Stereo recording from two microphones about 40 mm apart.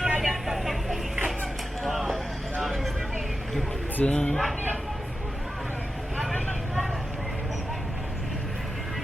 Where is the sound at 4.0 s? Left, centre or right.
Left.